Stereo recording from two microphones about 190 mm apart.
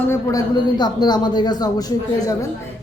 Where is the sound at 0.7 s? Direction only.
20° left (ahead or behind).